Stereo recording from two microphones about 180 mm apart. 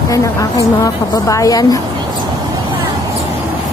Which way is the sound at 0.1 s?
20° left (ahead or behind).